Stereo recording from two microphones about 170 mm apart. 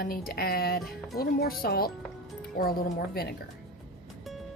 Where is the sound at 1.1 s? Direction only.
65° left (ahead or behind).